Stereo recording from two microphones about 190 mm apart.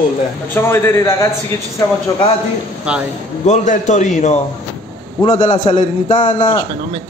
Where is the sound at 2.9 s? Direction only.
5° right (ahead or behind).